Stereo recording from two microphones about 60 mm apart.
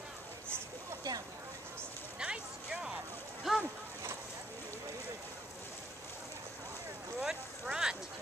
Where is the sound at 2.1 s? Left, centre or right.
Centre.